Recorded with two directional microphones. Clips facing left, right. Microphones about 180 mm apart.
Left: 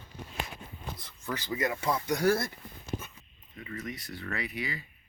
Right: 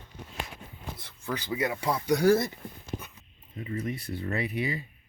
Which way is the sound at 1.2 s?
15° right (ahead or behind).